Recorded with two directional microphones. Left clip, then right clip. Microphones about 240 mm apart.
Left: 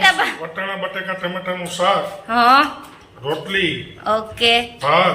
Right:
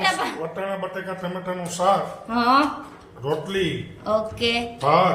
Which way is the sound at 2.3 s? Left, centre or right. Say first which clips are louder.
Left 6 dB; centre.